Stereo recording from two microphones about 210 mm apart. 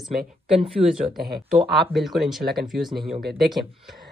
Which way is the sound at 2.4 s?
50° right (ahead or behind).